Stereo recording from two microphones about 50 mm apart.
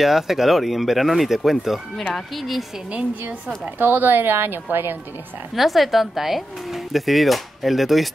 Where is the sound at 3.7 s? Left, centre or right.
Right.